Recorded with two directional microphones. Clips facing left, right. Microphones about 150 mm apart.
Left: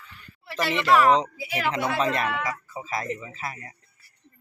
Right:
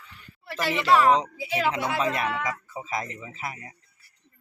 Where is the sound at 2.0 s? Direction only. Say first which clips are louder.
Left 1 dB; 5° right (ahead or behind).